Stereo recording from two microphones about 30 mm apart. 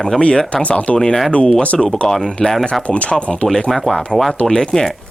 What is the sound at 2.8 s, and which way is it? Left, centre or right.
Speech, left.